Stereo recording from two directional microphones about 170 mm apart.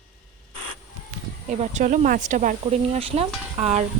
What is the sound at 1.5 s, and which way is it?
Speech, 45° right (ahead or behind).